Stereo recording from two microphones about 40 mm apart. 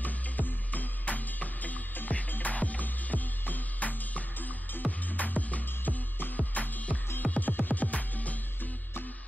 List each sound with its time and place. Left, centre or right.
0.0 s music: left
6.1 s music: left
6.5 s music: left